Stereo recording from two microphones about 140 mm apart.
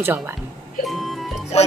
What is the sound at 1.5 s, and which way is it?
Speech, 50° left (ahead or behind).